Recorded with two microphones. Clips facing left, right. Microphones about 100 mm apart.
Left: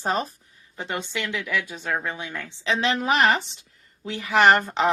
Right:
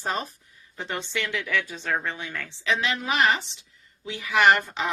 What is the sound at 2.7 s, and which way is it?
A woman's voice, 35° left (ahead or behind).